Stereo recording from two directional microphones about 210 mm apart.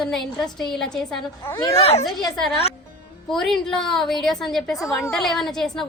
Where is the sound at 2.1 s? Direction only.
Centre (ahead or behind).